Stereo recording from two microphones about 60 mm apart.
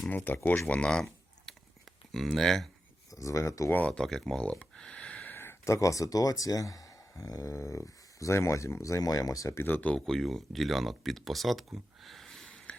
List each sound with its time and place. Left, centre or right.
0.3 s speech: left
0.7 s a sound: centre
2.1 s speech: centre
3.1 s speech: left
3.8 s speech: centre
4.3 s a sound: centre
5.2 s a sound: left
5.6 s speech: left
7.5 s speech: left
9.6 s speech: left
10.1 s speech: centre
12.5 s a sound: centre